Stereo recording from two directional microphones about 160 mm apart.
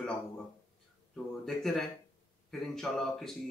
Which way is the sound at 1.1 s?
Centre (ahead or behind).